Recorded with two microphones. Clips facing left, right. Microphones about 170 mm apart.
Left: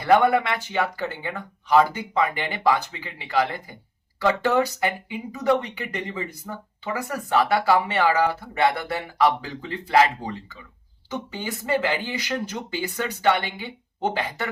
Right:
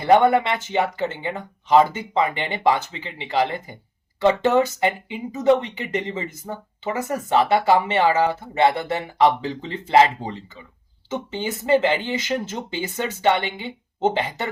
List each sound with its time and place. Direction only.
0.0 s speech: 25° right (ahead or behind)